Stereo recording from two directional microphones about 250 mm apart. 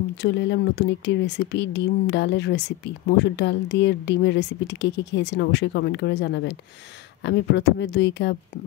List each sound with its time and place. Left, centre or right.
0.2 s speech: left